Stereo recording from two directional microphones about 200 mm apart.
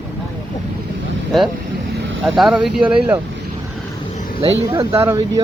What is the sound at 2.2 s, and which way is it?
Speech, centre (ahead or behind).